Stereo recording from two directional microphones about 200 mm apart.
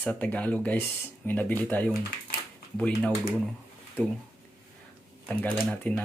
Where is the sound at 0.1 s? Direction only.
5° left (ahead or behind).